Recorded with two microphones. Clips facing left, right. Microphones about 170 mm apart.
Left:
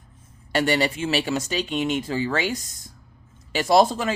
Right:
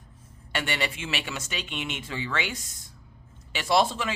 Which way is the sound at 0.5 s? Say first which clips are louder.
Left 9 dB; 40° left (ahead or behind).